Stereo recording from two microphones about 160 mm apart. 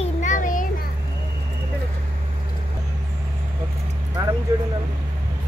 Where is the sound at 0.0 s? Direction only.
50° left (ahead or behind).